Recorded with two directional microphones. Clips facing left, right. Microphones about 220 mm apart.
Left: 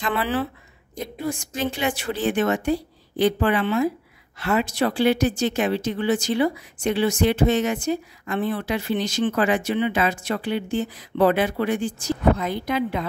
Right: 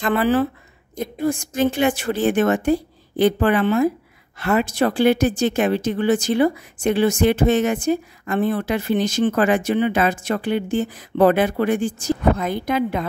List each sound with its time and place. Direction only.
0.0 s a woman's voice: 45° right (ahead or behind)